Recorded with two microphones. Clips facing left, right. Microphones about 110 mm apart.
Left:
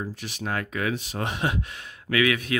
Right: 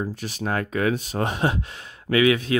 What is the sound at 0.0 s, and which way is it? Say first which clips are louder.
Speech: right 4 dB; 40° right (ahead or behind).